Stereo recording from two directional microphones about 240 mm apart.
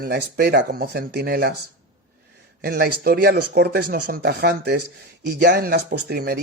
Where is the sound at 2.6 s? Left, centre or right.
Right.